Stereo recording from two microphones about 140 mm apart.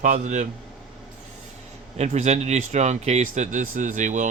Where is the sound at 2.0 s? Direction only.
55° right (ahead or behind).